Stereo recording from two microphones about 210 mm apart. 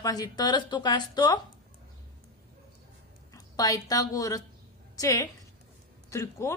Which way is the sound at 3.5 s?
15° left (ahead or behind).